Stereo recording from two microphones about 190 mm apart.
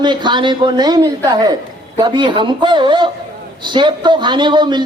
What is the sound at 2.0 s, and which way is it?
A man's voice, 25° right (ahead or behind).